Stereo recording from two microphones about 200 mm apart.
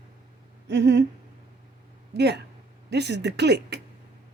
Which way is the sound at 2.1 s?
55° right (ahead or behind).